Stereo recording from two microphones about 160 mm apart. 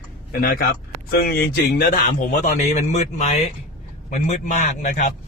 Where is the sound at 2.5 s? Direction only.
45° left (ahead or behind).